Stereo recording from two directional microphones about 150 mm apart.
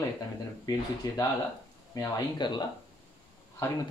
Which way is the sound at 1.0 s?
25° left (ahead or behind).